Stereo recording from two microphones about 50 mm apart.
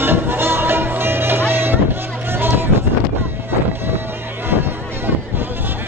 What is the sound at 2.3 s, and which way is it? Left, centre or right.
Vehicle, right.